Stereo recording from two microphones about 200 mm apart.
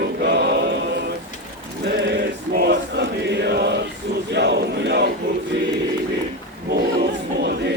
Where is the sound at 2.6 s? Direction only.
60° right (ahead or behind).